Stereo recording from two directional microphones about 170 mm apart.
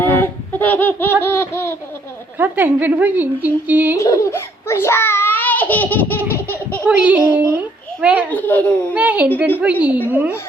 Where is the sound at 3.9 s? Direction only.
20° left (ahead or behind).